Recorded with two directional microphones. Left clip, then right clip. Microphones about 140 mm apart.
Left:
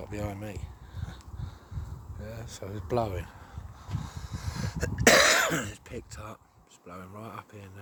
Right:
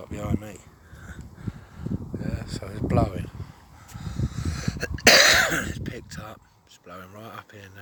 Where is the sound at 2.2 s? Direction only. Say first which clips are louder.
Right 6 dB; 10° left (ahead or behind); by 3.3 s 30° left (ahead or behind).